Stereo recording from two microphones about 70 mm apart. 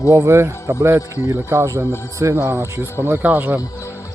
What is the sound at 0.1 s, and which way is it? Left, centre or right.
A man's voice, right.